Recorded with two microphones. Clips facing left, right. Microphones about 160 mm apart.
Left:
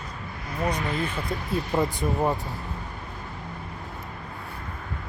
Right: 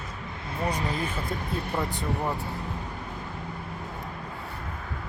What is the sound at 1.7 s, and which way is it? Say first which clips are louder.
Speech: left 6 dB; 15° left (ahead or behind).